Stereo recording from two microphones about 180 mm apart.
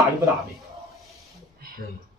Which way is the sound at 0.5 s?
Centre (ahead or behind).